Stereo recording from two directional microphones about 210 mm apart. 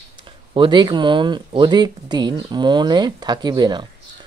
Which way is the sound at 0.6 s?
20° right (ahead or behind).